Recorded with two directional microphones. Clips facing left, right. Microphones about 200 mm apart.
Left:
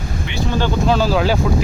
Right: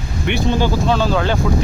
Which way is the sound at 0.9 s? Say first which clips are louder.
Left 1 dB; 5° left (ahead or behind).